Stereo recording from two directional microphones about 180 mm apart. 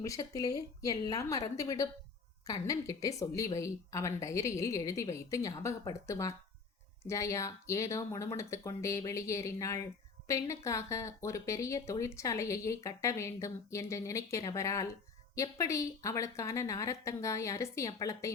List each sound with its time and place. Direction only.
0.0 s a woman's voice: 20° left (ahead or behind)